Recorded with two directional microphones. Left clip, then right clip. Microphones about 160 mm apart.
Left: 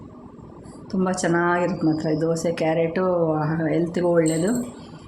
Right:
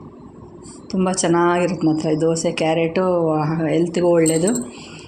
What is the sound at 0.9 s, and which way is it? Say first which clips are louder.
Speech: right 4 dB; 15° right (ahead or behind).